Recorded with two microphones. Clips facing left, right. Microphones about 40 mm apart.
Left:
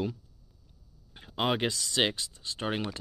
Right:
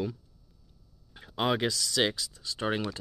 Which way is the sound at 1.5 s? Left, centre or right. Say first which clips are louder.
Right 1 dB; left.